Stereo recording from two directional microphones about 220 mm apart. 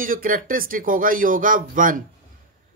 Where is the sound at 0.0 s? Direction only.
40° right (ahead or behind).